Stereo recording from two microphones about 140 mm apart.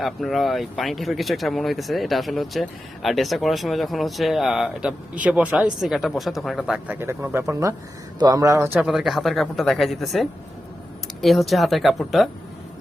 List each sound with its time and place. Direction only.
0.0 s speech: centre (ahead or behind)
6.8 s a man's voice: 15° right (ahead or behind)
8.9 s speech: centre (ahead or behind)